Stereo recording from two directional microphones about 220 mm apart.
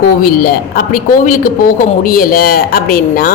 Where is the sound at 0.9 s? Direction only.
40° left (ahead or behind).